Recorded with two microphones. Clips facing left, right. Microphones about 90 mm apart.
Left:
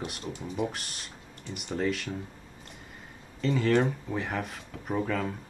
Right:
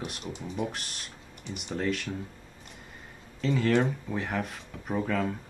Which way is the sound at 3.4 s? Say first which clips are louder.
Even; centre (ahead or behind).